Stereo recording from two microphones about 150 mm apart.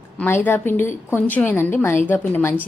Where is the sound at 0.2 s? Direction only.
15° left (ahead or behind).